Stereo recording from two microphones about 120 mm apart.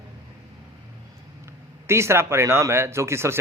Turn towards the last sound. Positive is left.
turn(degrees=-20)  # may be behind; listen again after turning